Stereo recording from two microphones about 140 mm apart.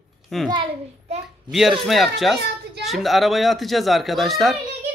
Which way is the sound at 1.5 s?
Centre (ahead or behind).